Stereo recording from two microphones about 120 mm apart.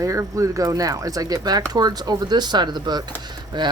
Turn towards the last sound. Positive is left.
turn(degrees=-35)  # may be behind; listen again after turning